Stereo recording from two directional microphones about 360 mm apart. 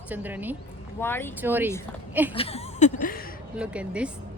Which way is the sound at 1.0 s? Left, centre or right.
Centre.